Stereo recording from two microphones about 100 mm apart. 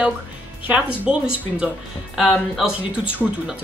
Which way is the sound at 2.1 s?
Centre (ahead or behind).